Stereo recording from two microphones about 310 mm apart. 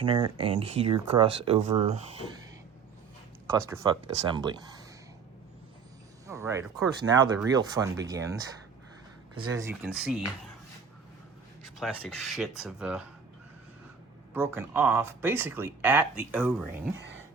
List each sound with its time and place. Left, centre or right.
0.0 s speech: centre
3.7 s speech: centre
6.2 s speech: centre
11.8 s speech: centre
14.3 s speech: centre